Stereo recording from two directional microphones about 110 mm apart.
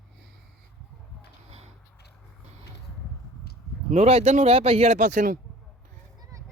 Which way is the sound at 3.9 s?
80° right.